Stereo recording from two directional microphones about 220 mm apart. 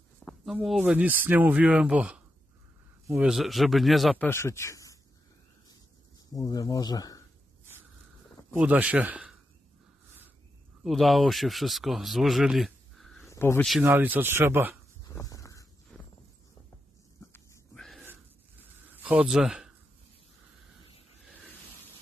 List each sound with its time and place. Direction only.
0.2 s a man's voice: centre (ahead or behind)
4.3 s speech: 10° left (ahead or behind)
6.3 s speech: 15° left (ahead or behind)
8.5 s speech: 5° right (ahead or behind)
10.8 s speech: centre (ahead or behind)
13.3 s speech: 10° left (ahead or behind)
13.7 s speech: 5° right (ahead or behind)
15.0 s a sound: 15° left (ahead or behind)
15.9 s walk: 5° left (ahead or behind)
17.3 s a sound: centre (ahead or behind)
18.0 s a sound: 10° right (ahead or behind)